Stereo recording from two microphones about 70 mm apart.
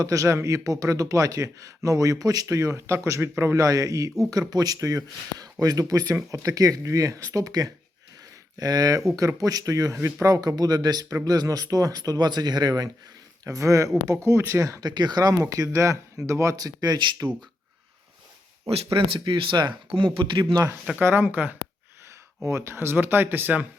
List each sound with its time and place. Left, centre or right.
0.0 s a man's voice: right
3.6 s a man's voice: right
10.2 s speech: right
13.4 s a man's voice: right
14.3 s speech: right
14.6 s a man's voice: right
14.8 s a man's voice: right
19.2 s speech: right
20.4 s speech: right
21.0 s speech: right
22.4 s speech: right